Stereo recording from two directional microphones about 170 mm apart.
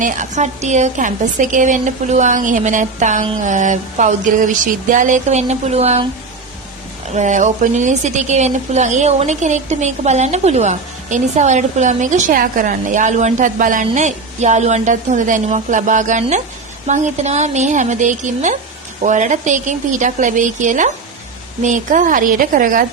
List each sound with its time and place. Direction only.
0.0 s speech: 45° right (ahead or behind)
7.1 s speech: 45° right (ahead or behind)